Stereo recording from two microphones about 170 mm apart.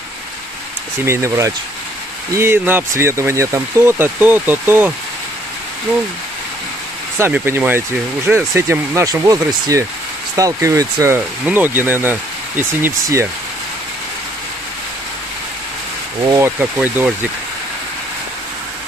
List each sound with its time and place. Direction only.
1.0 s speech: 15° right (ahead or behind)
7.2 s speech: 15° right (ahead or behind)
16.3 s speech: 15° right (ahead or behind)